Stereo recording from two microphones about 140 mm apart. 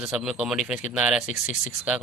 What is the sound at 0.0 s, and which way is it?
Speech, 5° right (ahead or behind).